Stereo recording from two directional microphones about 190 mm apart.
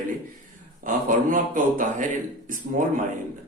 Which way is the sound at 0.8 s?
45° right (ahead or behind).